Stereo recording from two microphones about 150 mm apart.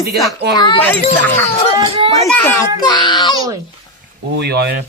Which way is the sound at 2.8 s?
30° left (ahead or behind).